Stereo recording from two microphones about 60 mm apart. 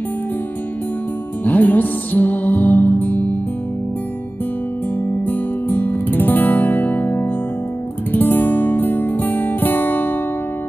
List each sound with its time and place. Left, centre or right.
1.4 s music: left
5.2 s music: left